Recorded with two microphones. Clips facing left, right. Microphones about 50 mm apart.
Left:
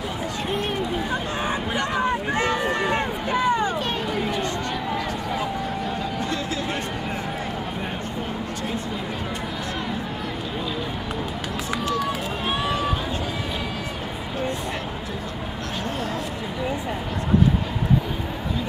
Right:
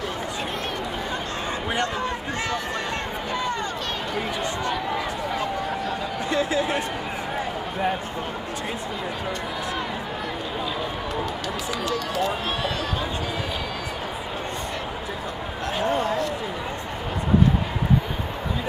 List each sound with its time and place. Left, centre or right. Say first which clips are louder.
2.0 s run: left 5 dB; centre
6.3 s a sound: right 4 dB; right
12.2 s run: right 1 dB; centre